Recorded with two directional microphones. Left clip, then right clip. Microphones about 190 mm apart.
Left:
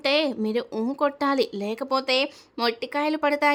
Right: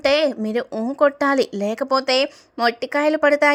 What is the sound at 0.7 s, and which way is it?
A woman's voice, 5° right (ahead or behind).